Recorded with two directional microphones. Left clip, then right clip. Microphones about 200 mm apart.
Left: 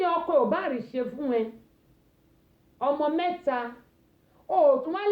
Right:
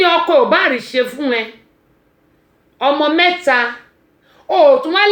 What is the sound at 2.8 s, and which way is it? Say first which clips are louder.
A woman's voice: right 13 dB; 25° right (ahead or behind).